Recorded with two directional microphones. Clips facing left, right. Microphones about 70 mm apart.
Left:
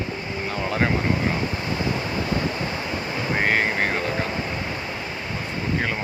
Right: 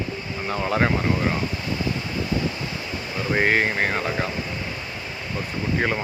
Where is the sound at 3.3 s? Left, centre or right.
Centre.